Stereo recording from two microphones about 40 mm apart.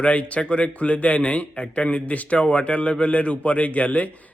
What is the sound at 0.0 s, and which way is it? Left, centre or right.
A man's voice, left.